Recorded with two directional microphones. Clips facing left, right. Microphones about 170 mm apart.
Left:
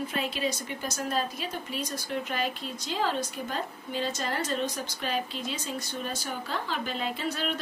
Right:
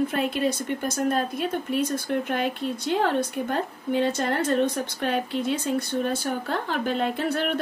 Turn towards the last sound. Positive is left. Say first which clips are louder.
# right 6 dB
turn(degrees=-55)  # may be behind; listen again after turning